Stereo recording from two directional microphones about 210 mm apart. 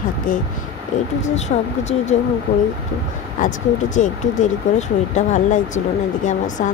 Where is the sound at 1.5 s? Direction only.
35° left (ahead or behind).